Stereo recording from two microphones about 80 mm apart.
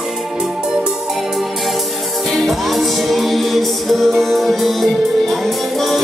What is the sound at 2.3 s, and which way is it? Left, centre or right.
Music, centre.